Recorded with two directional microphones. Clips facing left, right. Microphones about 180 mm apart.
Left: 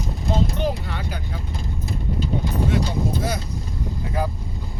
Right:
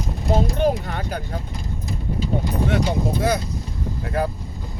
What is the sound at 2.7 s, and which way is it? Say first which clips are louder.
Speech: right 4 dB; 65° right (ahead or behind).